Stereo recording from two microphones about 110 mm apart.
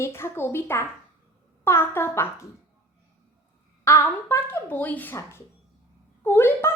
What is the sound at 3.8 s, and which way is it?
A woman's voice, 25° left (ahead or behind).